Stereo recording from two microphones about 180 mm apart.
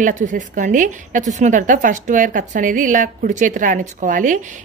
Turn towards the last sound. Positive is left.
turn(degrees=-45)  # may be behind; listen again after turning